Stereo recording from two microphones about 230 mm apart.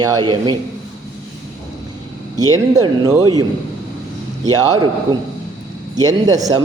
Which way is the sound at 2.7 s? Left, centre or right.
Centre.